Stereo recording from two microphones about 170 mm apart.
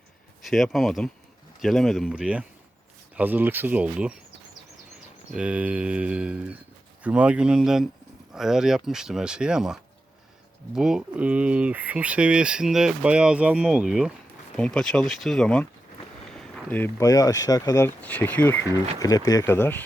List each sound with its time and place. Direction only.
0.4 s speech: centre (ahead or behind)
5.3 s speech: 5° right (ahead or behind); by 19.8 s 10° left (ahead or behind)